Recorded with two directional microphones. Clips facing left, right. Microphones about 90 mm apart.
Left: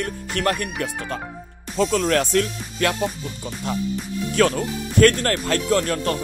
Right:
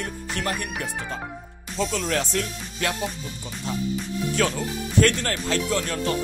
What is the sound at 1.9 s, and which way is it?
Speech, 50° left (ahead or behind).